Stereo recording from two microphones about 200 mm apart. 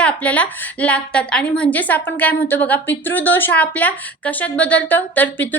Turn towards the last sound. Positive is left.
turn(degrees=10)  # may be behind; listen again after turning